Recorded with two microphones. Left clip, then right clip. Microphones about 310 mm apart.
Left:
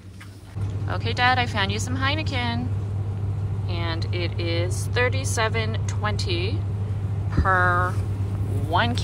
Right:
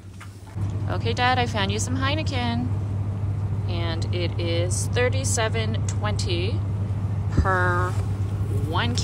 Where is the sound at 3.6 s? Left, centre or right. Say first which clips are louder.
Left 1 dB; centre.